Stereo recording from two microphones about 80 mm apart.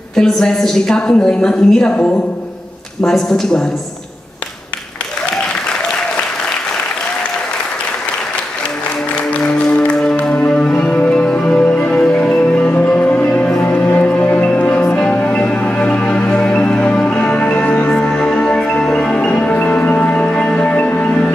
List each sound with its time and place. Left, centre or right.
0.1 s a woman's voice: centre
9.1 s music: centre